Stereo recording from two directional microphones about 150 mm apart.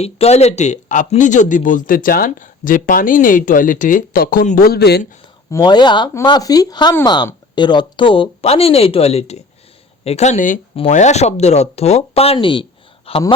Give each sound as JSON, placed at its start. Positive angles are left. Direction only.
{"t": 0.0, "sound": "a man's voice", "side_deg": 45}
{"t": 5.5, "sound": "speech", "side_deg": 25}